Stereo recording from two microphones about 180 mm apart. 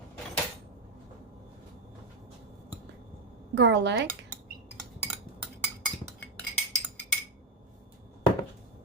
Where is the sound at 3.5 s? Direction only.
80° right.